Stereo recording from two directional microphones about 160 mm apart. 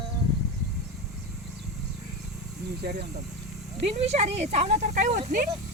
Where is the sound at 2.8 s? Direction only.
90° right.